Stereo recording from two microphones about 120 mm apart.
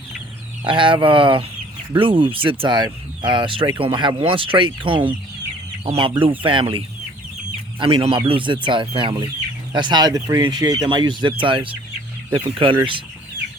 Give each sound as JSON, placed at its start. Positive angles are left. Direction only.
{"t": 0.6, "sound": "speech", "side_deg": -45}